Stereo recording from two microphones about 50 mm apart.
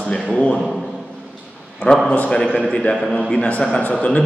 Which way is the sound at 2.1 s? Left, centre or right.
Left.